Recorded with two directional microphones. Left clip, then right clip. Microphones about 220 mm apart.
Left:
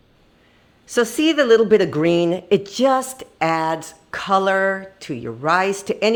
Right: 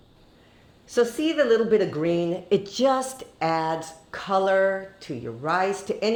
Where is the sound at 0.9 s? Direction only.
40° left (ahead or behind).